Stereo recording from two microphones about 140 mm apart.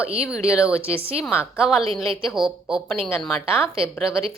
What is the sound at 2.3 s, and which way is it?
Speech, 5° right (ahead or behind).